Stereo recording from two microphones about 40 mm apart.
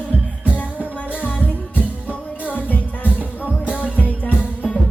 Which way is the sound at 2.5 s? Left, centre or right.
Left.